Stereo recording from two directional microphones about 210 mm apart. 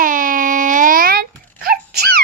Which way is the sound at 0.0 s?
40° right (ahead or behind).